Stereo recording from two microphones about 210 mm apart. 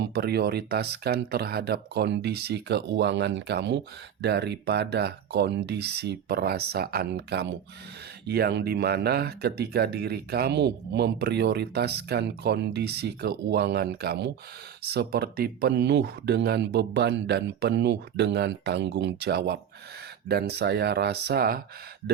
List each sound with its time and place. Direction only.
0.0 s speech: 50° right (ahead or behind)